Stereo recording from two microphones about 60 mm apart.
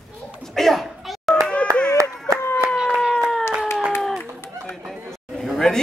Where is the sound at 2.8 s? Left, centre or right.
Centre.